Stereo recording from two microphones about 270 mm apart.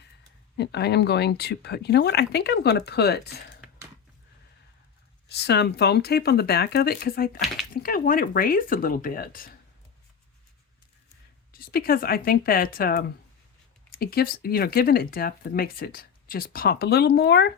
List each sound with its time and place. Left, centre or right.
0.5 s speech: left
5.3 s speech: left
11.5 s speech: left